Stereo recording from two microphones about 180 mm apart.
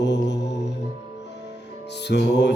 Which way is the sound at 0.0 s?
75° left (ahead or behind).